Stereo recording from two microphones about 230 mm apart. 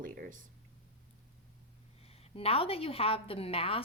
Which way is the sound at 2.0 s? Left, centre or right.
Left.